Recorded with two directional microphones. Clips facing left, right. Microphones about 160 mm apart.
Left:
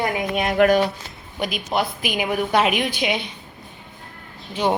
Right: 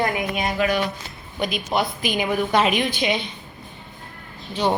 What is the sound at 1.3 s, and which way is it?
Speech, 5° left (ahead or behind).